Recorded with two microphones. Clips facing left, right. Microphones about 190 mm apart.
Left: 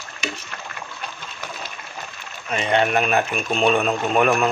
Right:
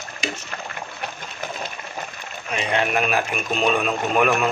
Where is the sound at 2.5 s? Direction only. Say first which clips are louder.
Left 3 dB; 5° right (ahead or behind).